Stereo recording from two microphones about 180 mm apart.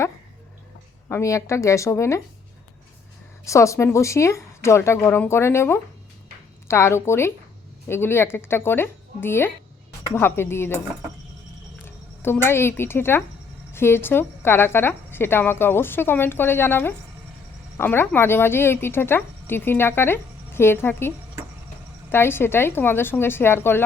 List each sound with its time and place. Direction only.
1.0 s speech: 15° left (ahead or behind)
3.4 s speech: 15° left (ahead or behind)
11.9 s speech: 15° left (ahead or behind)
22.1 s speech: 15° left (ahead or behind)